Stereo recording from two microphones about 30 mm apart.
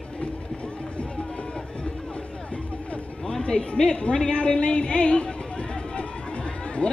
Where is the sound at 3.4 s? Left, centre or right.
Left.